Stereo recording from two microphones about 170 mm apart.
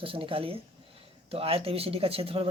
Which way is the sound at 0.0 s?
30° right (ahead or behind).